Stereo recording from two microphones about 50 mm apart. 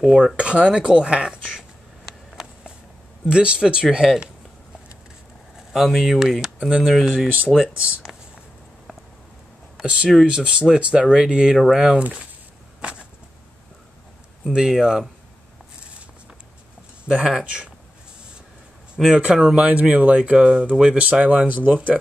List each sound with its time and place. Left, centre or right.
0.0 s speech: centre
0.4 s speech: right
1.2 s a sound: centre
3.3 s speech: centre
5.7 s speech: centre
9.8 s speech: centre
11.5 s speech: centre
12.0 s speech: right
14.4 s speech: centre
17.0 s speech: centre
19.0 s speech: centre
19.3 s speech: centre
19.6 s speech: right